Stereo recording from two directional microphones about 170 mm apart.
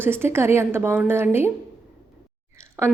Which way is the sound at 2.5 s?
15° right (ahead or behind).